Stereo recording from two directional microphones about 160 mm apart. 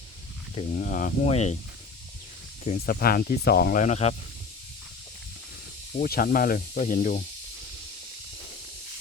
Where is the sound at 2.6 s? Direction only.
60° left (ahead or behind).